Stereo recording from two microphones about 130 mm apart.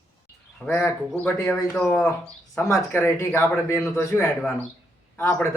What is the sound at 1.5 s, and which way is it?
Speech, 30° left (ahead or behind).